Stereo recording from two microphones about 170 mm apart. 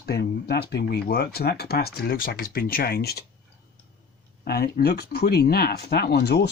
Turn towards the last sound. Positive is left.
turn(degrees=75)  # may be behind; listen again after turning